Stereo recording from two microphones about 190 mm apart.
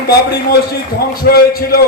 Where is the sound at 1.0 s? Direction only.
55° left (ahead or behind).